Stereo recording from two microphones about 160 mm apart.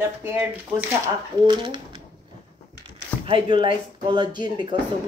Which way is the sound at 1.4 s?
30° right (ahead or behind).